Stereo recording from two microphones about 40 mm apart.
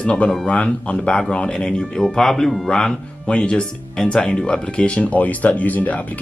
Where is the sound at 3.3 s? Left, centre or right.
Left.